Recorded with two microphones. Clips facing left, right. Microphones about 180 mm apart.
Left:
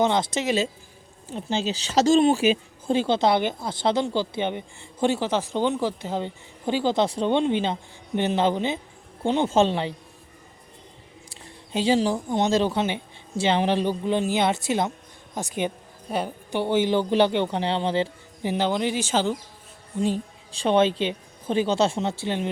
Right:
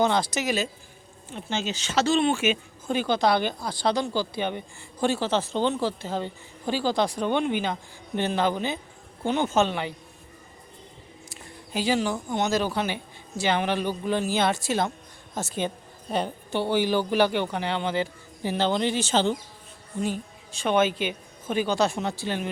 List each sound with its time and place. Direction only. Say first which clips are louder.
0.0 s speech: left 1 dB; 20° left (ahead or behind)
11.3 s speech: left 3 dB; 25° left (ahead or behind)
18.5 s speech: even; 10° left (ahead or behind)
20.0 s a woman's voice: left 4 dB; 30° left (ahead or behind)